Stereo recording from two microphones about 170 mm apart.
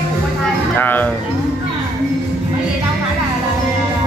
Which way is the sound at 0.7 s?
10° left (ahead or behind).